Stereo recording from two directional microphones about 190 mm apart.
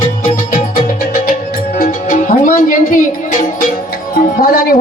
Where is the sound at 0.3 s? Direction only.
45° left (ahead or behind).